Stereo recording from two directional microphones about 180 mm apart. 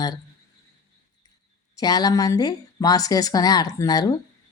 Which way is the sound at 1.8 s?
20° left (ahead or behind).